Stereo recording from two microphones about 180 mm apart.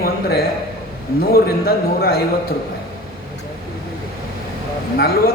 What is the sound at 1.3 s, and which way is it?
Speech, 55° left (ahead or behind).